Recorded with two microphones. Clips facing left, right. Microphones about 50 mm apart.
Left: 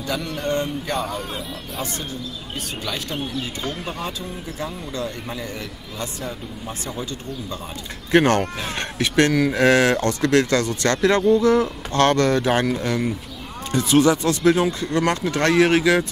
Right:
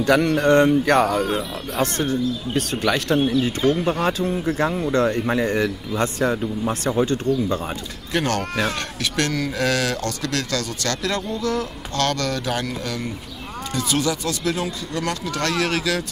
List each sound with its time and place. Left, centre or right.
0.0 s speech: right
3.6 s speech: centre
4.7 s speech: right
6.6 s speech: right
8.1 s speech: left
13.7 s speech: left